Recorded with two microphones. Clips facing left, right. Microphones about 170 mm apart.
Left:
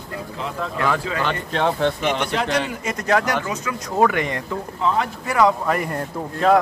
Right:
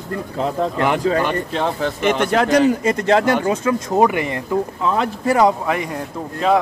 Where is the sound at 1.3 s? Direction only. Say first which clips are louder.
Right 1 dB; centre (ahead or behind).